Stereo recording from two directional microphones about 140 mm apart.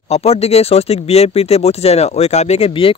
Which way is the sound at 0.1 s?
45° left (ahead or behind).